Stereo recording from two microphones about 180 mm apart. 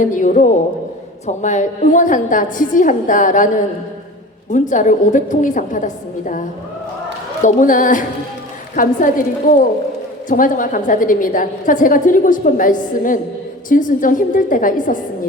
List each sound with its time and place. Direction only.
0.0 s a woman's voice: 45° left (ahead or behind)
7.4 s a woman's voice: 50° left (ahead or behind)
10.2 s a woman's voice: 50° left (ahead or behind)